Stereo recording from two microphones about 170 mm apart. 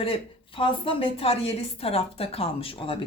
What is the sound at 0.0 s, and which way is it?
Speech, 30° left (ahead or behind).